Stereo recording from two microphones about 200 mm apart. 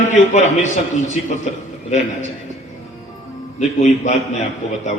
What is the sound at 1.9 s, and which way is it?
Speech, 35° left (ahead or behind).